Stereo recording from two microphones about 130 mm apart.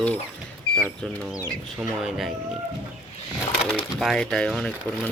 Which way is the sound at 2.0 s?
Centre (ahead or behind).